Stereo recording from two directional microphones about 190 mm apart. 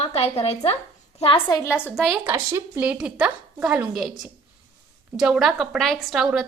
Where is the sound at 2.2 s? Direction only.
10° right (ahead or behind).